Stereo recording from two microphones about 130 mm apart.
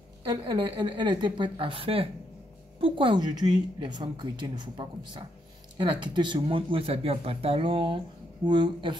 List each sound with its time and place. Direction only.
0.2 s a woman's voice: 35° right (ahead or behind)